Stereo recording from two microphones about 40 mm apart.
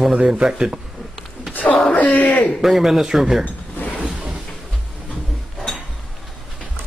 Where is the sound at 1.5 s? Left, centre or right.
Left.